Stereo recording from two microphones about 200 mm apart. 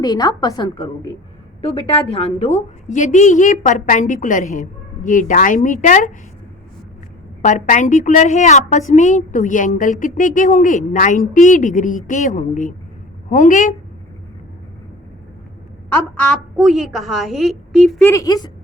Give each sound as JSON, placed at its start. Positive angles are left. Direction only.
{"t": 0.0, "sound": "a woman's voice", "side_deg": 20}
{"t": 7.4, "sound": "a woman's voice", "side_deg": 40}
{"t": 16.3, "sound": "a woman's voice", "side_deg": 0}
{"t": 18.1, "sound": "a woman's voice", "side_deg": 15}